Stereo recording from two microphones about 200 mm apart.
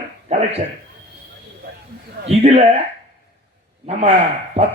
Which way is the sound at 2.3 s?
30° right (ahead or behind).